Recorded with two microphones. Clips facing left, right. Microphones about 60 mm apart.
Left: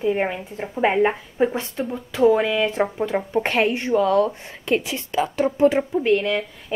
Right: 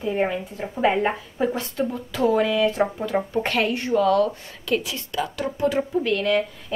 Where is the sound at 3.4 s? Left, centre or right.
Left.